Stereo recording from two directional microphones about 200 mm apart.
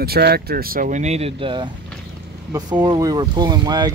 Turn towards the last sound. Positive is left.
turn(degrees=-20)  # may be behind; listen again after turning